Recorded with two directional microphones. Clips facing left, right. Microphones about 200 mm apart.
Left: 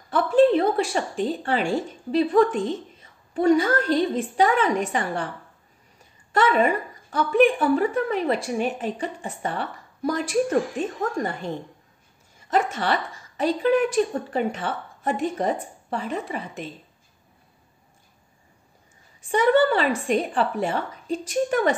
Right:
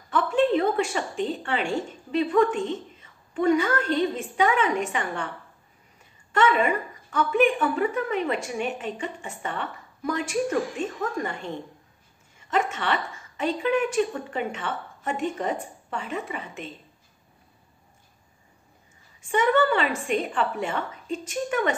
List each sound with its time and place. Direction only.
0.1 s a sound: 35° left (ahead or behind)
1.2 s speech: 35° left (ahead or behind)
6.3 s speech: 40° left (ahead or behind)
12.4 s a woman's voice: 35° left (ahead or behind)
19.3 s speech: 35° left (ahead or behind)